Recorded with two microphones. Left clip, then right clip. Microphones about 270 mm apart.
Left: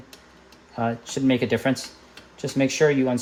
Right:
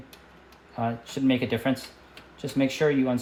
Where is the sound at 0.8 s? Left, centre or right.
Left.